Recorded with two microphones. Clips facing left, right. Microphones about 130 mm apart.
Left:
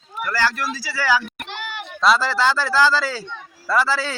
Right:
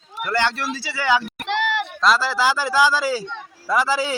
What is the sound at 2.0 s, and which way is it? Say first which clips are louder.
A man's voice: left 2 dB; centre (ahead or behind).